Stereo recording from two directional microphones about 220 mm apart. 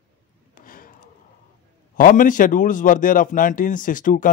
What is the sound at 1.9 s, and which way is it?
A man's voice, 40° left (ahead or behind).